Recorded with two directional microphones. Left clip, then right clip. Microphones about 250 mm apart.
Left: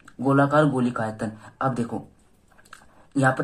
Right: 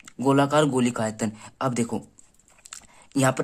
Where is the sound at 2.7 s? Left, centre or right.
Right.